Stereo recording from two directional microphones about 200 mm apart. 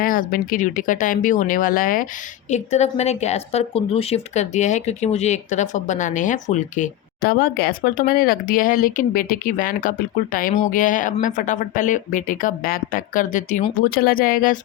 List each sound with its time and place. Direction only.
0.0 s speech: 45° left (ahead or behind)
2.5 s a woman's voice: 35° left (ahead or behind)